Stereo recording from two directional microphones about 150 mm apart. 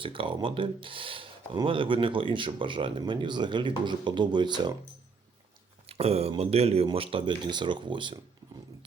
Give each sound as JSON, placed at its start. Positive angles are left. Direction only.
{"t": 0.0, "sound": "speech", "side_deg": -35}
{"t": 5.8, "sound": "speech", "side_deg": -45}